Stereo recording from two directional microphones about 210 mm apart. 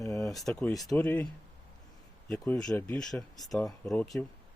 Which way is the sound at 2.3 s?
5° left (ahead or behind).